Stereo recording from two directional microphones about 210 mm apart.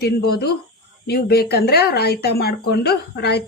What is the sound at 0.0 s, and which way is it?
Speech, 50° left (ahead or behind).